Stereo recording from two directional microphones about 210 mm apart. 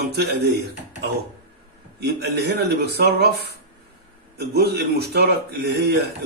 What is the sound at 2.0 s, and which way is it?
Speech, 50° right (ahead or behind).